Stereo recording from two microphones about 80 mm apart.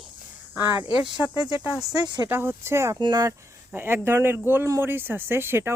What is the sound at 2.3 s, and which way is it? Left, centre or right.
Speech, right.